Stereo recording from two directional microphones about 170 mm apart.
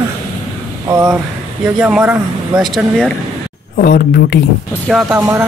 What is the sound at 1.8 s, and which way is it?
Speech, 10° right (ahead or behind).